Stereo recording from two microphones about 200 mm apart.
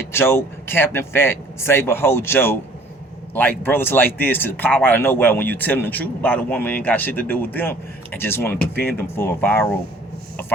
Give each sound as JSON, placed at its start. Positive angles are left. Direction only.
{"t": 0.1, "sound": "speech", "side_deg": 10}
{"t": 3.6, "sound": "speech", "side_deg": 10}